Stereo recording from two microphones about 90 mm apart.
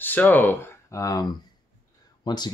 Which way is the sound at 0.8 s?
40° left (ahead or behind).